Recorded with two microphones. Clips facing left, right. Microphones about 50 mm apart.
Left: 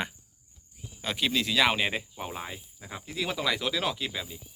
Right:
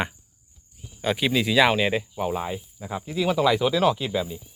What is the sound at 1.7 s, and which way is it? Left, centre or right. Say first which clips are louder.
Speech: right 5 dB; centre.